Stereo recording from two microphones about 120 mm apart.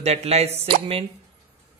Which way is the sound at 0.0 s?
65° right (ahead or behind).